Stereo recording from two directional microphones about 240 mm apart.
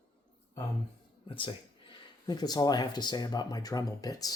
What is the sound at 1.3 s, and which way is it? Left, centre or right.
Speech, left.